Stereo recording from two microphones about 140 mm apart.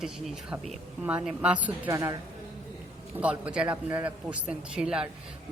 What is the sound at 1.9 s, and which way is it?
Speech, 20° right (ahead or behind).